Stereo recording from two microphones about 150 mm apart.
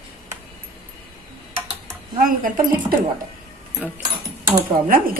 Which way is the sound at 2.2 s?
70° right (ahead or behind).